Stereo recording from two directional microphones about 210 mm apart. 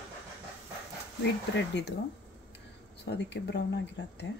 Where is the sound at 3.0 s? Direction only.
55° left (ahead or behind).